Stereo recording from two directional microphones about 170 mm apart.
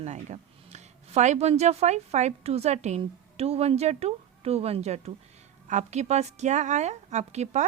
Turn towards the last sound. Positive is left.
turn(degrees=-40)  # may be behind; listen again after turning